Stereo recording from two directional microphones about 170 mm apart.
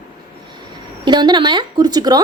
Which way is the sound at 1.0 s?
25° right (ahead or behind).